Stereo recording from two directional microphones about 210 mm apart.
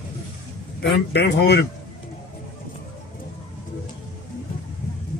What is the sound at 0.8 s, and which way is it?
Speech, 50° left (ahead or behind).